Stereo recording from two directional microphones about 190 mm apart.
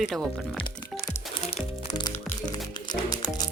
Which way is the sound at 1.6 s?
25° left (ahead or behind).